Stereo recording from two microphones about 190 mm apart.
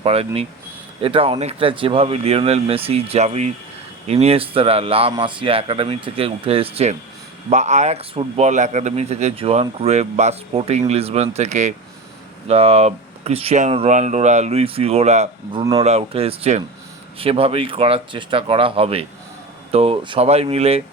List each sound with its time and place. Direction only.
0.0 s a man's voice: 30° right (ahead or behind)